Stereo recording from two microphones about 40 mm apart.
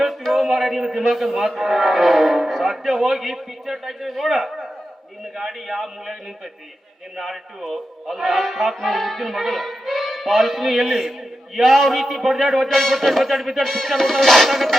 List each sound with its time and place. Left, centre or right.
0.3 s a man's voice: centre
8.0 s a man's voice: centre